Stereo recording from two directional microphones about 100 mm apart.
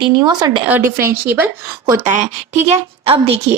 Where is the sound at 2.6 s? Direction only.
80° right.